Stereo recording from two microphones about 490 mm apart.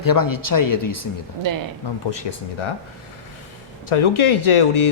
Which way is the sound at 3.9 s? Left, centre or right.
Left.